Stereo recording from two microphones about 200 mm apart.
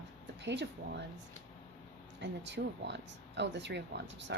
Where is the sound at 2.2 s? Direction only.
60° right (ahead or behind).